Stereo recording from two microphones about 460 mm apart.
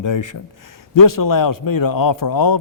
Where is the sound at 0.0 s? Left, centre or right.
Left.